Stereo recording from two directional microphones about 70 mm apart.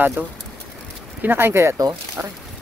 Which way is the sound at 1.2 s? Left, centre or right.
Right.